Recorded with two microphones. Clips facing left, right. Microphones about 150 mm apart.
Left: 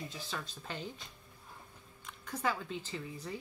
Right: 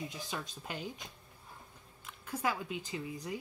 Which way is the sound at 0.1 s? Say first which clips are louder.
Right 1 dB; 15° right (ahead or behind).